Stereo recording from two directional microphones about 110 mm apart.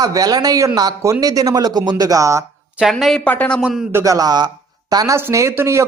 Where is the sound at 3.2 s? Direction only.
10° left (ahead or behind).